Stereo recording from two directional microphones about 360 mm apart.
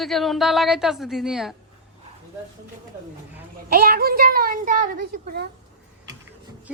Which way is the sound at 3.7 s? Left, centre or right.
Right.